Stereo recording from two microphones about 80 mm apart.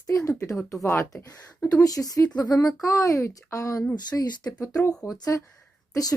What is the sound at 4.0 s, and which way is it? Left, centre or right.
Speech, left.